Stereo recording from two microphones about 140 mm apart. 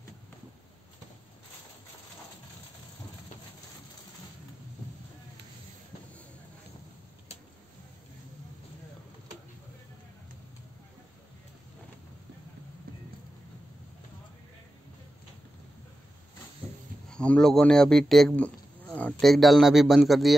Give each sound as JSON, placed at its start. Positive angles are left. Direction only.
{"t": 17.1, "sound": "a man's voice", "side_deg": 5}